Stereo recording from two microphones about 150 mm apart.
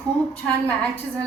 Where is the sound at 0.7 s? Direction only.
10° left (ahead or behind).